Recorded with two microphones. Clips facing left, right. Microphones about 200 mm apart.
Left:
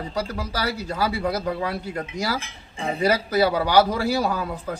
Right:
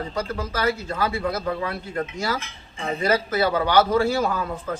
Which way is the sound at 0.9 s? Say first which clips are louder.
Left 1 dB; 10° left (ahead or behind).